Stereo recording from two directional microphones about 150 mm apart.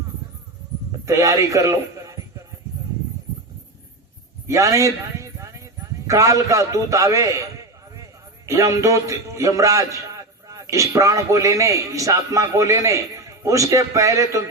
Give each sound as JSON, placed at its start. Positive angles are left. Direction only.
{"t": 1.0, "sound": "speech", "side_deg": -20}
{"t": 4.4, "sound": "a sound", "side_deg": -20}
{"t": 6.1, "sound": "a man's voice", "side_deg": -20}
{"t": 8.4, "sound": "a man's voice", "side_deg": -20}